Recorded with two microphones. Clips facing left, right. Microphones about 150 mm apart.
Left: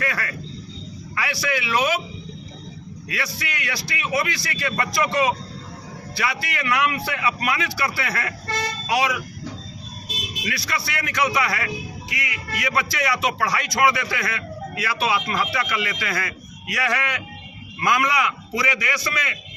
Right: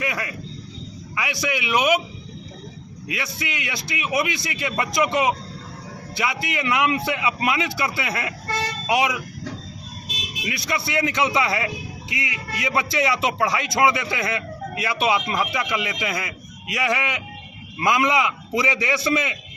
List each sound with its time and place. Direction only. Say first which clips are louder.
0.0 s a man's voice: even; 20° right (ahead or behind)
3.1 s a man's voice: right 1 dB; 20° right (ahead or behind)
10.4 s a man's voice: right 2 dB; 20° right (ahead or behind)